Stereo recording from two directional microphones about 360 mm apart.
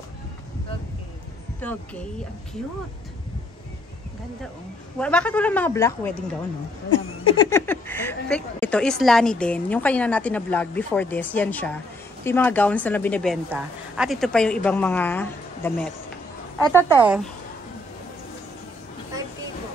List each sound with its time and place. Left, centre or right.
1.6 s speech: centre
4.9 s speech: centre
7.3 s speech: centre
16.7 s speech: centre